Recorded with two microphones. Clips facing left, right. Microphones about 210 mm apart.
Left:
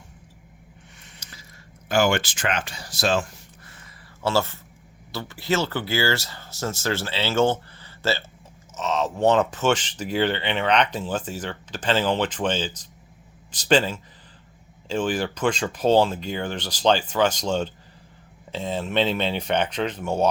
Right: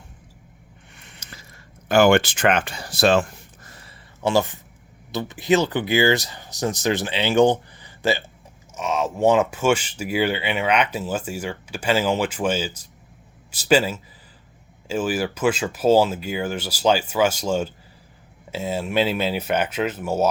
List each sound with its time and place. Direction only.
0.9 s a sound: 60° right (ahead or behind)
1.9 s speech: 55° right (ahead or behind)
4.2 s speech: 15° right (ahead or behind)